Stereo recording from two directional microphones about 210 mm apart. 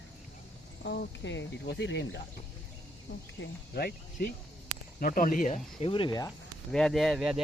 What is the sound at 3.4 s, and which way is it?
Speech, 50° left (ahead or behind).